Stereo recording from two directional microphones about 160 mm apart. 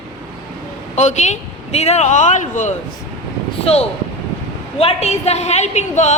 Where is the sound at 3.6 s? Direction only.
40° left (ahead or behind).